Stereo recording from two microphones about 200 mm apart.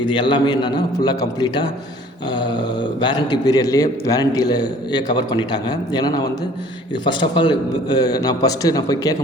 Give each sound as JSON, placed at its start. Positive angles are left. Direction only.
{"t": 0.0, "sound": "a man's voice", "side_deg": 25}